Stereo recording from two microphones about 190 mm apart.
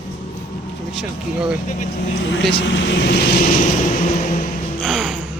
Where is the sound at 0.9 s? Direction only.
5° right (ahead or behind).